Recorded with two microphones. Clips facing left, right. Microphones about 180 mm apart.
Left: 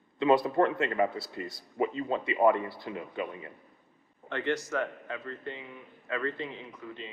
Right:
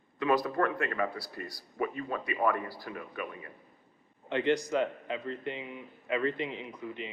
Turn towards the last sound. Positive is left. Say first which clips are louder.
# right 3 dB
turn(degrees=-15)  # may be behind; listen again after turning